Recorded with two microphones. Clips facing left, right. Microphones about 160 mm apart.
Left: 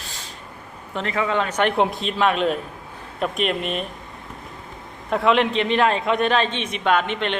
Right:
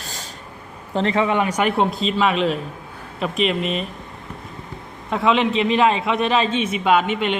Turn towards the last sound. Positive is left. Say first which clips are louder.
# right 3 dB
turn(degrees=-10)  # may be behind; listen again after turning